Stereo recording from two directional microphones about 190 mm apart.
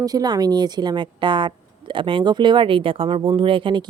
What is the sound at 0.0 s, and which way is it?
A woman's voice, 20° right (ahead or behind).